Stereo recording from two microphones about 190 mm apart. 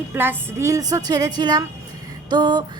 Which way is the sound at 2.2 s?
25° right (ahead or behind).